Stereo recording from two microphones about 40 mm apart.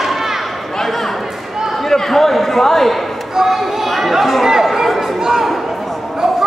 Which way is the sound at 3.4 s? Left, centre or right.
Centre.